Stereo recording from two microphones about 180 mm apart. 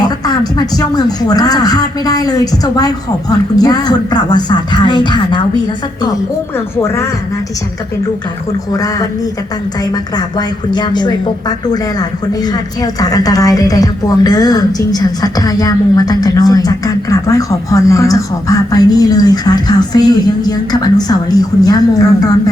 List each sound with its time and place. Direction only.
0.0 s a woman's voice: 20° left (ahead or behind)
8.7 s a woman's voice: 20° left (ahead or behind)